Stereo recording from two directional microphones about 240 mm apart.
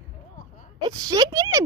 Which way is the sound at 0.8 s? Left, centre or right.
Centre.